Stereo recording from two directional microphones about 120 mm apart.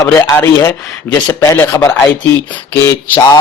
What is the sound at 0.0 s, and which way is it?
Speech, 25° left (ahead or behind).